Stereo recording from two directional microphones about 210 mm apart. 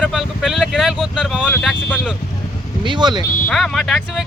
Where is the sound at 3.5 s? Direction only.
Centre (ahead or behind).